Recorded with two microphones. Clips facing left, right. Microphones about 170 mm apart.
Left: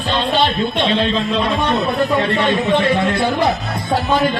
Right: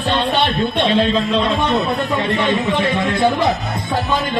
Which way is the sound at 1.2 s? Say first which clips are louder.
Right 1 dB; centre (ahead or behind).